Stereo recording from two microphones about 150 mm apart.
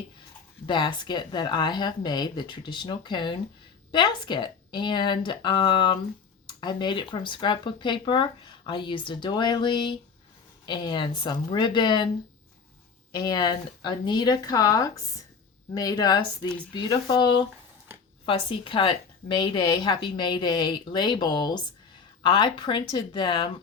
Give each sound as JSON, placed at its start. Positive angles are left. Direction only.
{"t": 0.7, "sound": "speech", "side_deg": 30}
{"t": 13.1, "sound": "speech", "side_deg": 30}